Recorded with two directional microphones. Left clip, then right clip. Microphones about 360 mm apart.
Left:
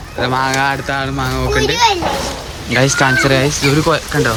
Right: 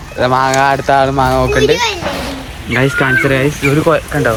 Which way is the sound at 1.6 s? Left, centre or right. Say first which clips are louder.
Right 1 dB; left.